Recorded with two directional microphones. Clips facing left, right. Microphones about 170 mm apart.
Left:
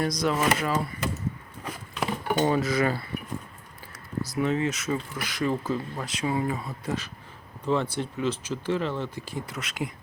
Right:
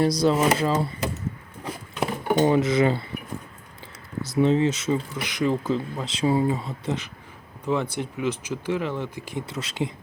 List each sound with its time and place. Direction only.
0.0 s speech: 30° right (ahead or behind)
2.0 s speech: 20° right (ahead or behind)
4.2 s speech: 25° right (ahead or behind)
9.6 s speech: 30° right (ahead or behind)